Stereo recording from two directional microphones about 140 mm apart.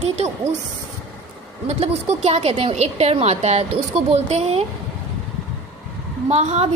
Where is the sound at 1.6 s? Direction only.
50° right (ahead or behind).